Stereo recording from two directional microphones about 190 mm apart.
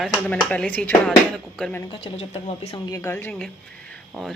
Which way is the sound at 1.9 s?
30° left (ahead or behind).